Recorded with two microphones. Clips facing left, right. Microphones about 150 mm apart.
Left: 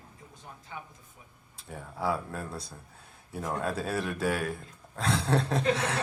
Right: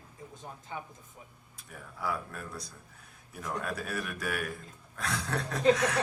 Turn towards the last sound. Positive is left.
turn(degrees=30)  # may be behind; listen again after turning